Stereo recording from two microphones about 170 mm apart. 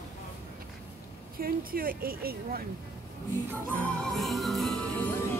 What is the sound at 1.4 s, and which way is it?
Speech, 60° right (ahead or behind).